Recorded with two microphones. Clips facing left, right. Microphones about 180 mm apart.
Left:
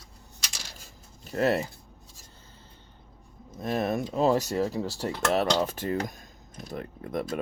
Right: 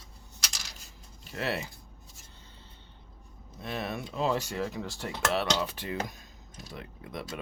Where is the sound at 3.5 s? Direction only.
45° left (ahead or behind).